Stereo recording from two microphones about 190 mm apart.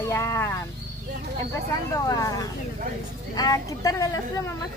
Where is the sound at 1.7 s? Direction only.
20° left (ahead or behind).